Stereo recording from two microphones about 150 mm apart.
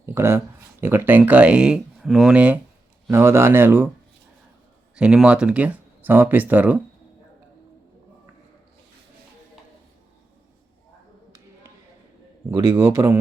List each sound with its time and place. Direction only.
0.0 s speech: 15° right (ahead or behind)
4.9 s speech: 5° right (ahead or behind)
12.5 s a man's voice: 20° right (ahead or behind)